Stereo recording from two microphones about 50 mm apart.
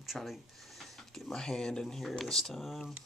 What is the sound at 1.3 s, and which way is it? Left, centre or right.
Speech, centre.